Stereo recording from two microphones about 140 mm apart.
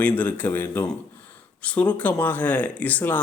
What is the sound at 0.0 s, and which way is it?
Speech, 10° left (ahead or behind).